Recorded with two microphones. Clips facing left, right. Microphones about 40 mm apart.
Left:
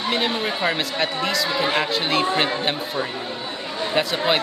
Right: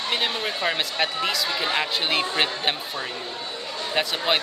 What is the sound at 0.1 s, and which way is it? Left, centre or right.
Speech, centre.